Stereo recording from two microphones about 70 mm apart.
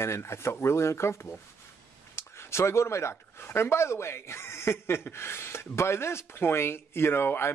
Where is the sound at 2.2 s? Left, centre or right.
Left.